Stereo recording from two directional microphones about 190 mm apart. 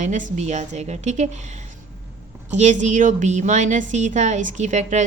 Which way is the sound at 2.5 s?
40° right (ahead or behind).